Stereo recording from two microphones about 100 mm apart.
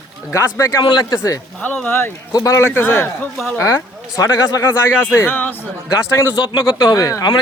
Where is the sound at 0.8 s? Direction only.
45° left (ahead or behind).